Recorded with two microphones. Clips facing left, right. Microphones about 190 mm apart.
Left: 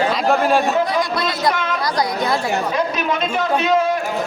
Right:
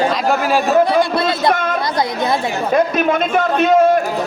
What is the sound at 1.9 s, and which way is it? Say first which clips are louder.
Speech: right 1 dB; 25° right (ahead or behind).